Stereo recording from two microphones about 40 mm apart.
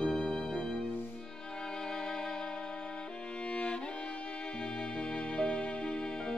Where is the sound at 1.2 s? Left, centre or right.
Centre.